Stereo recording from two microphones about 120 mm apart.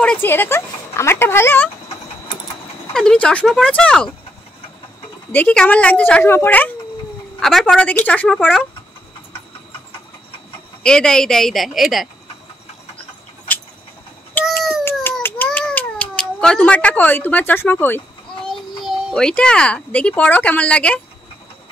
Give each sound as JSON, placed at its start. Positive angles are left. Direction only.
{"t": 0.0, "sound": "speech", "side_deg": 10}
{"t": 0.3, "sound": "speech", "side_deg": 20}
{"t": 2.9, "sound": "speech", "side_deg": 5}
{"t": 5.3, "sound": "speech", "side_deg": 10}
{"t": 7.3, "sound": "speech", "side_deg": 5}
{"t": 10.8, "sound": "speech", "side_deg": 5}
{"t": 14.4, "sound": "child singing", "side_deg": 0}
{"t": 15.2, "sound": "cat", "side_deg": 15}
{"t": 18.9, "sound": "speech", "side_deg": 5}